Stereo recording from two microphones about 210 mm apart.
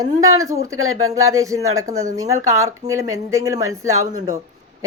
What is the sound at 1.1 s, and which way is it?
Speech, 15° right (ahead or behind).